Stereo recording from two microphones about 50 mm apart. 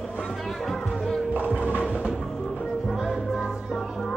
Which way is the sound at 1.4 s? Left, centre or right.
Left.